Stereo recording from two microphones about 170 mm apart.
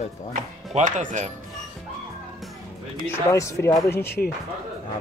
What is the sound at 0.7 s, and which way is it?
Speech, 45° right (ahead or behind).